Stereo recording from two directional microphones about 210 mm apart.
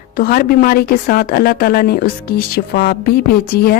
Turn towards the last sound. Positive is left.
turn(degrees=45)  # may be behind; listen again after turning